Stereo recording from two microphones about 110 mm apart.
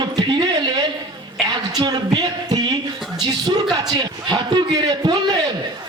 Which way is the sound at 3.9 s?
40° right (ahead or behind).